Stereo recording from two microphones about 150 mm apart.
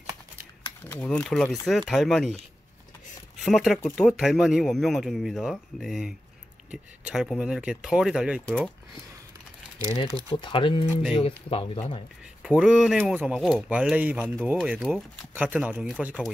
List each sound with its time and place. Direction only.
0.8 s a man's voice: 15° left (ahead or behind)
3.4 s a man's voice: centre (ahead or behind)
8.5 s speech: 5° left (ahead or behind)
10.3 s speech: 35° left (ahead or behind)
12.4 s speech: 5° right (ahead or behind)